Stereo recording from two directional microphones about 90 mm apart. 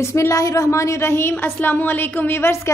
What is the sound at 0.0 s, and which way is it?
A woman's voice, 30° left (ahead or behind).